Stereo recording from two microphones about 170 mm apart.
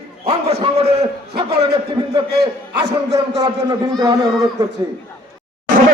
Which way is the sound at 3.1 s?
20° right (ahead or behind).